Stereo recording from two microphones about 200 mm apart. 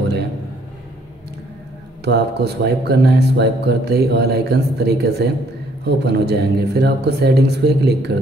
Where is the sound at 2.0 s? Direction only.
55° right (ahead or behind).